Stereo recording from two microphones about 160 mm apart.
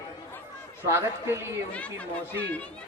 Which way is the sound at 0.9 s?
15° right (ahead or behind).